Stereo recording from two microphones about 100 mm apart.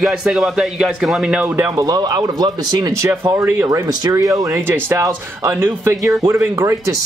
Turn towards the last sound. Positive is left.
turn(degrees=-30)  # may be behind; listen again after turning